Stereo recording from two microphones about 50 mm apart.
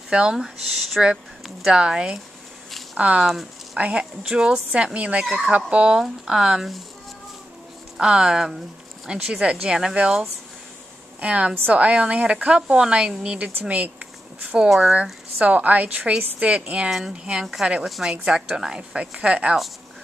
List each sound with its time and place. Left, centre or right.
0.1 s speech: centre
0.4 s speech: centre
1.7 s a woman's voice: centre
8.0 s a woman's voice: centre
13.7 s a woman's voice: right